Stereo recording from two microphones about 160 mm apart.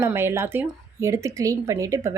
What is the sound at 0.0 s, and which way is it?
A woman's voice, 15° right (ahead or behind).